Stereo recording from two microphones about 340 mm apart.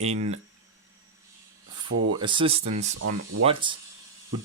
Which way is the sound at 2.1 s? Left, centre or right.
Centre.